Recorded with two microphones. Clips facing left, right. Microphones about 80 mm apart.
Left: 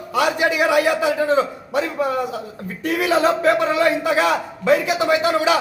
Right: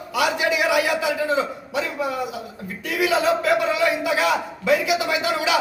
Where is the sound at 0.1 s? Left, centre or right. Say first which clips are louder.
Left 3 dB; left.